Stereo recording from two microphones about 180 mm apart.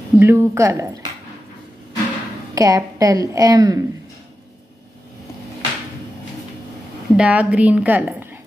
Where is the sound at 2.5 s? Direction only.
20° right (ahead or behind).